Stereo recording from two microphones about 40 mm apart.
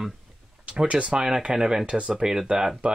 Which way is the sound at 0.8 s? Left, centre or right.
Right.